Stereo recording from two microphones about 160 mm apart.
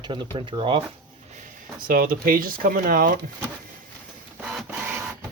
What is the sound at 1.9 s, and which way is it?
Speech, 60° right (ahead or behind).